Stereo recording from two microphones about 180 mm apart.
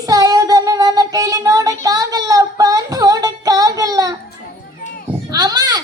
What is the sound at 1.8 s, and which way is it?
Music, 20° right (ahead or behind).